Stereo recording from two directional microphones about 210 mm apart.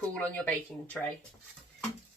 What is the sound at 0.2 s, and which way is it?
Speech, 5° left (ahead or behind).